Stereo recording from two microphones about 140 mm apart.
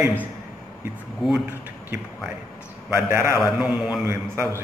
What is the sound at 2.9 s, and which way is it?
Speech, 20° right (ahead or behind).